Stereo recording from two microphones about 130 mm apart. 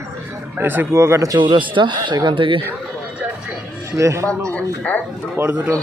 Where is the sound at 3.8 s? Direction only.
25° right (ahead or behind).